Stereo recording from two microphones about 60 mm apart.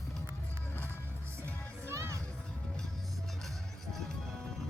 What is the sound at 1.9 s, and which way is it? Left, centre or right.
Music, right.